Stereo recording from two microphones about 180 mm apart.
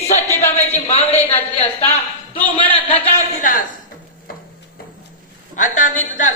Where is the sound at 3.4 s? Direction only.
50° left (ahead or behind).